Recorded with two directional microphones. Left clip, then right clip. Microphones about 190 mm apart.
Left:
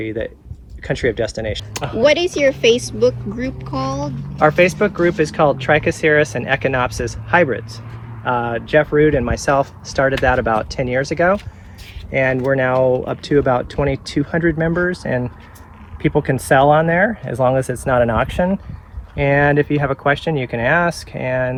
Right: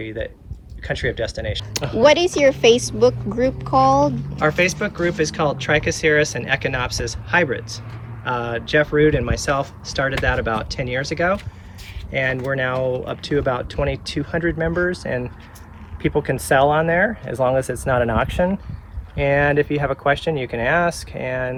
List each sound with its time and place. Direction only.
0.0 s speech: 30° left (ahead or behind)
2.0 s speech: 15° right (ahead or behind)
4.4 s speech: 20° left (ahead or behind); by 21.5 s 40° left (ahead or behind)